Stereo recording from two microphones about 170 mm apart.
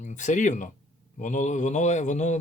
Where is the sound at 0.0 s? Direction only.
45° left (ahead or behind).